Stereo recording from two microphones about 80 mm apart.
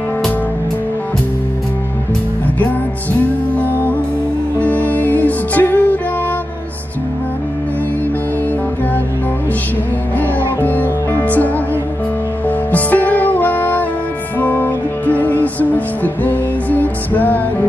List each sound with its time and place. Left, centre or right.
2.6 s music: left
10.1 s music: left